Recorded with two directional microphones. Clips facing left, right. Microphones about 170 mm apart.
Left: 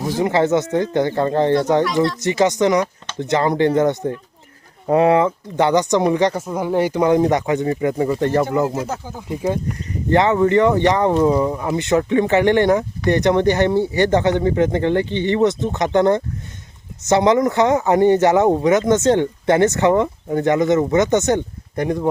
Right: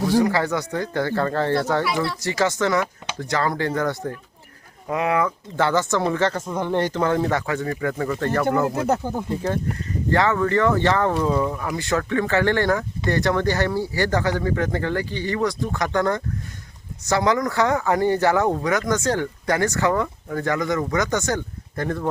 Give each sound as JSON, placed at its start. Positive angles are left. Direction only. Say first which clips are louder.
{"t": 0.2, "sound": "speech", "louder": "left 4 dB", "side_deg": 20}
{"t": 4.9, "sound": "speech", "louder": "left 8 dB", "side_deg": 30}
{"t": 5.5, "sound": "speech", "louder": "left 5 dB", "side_deg": 20}
{"t": 8.8, "sound": "speech", "louder": "right 5 dB", "side_deg": -60}
{"t": 9.3, "sound": "speech", "louder": "left 6 dB", "side_deg": 15}